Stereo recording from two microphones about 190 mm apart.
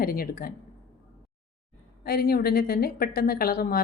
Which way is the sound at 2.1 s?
50° left (ahead or behind).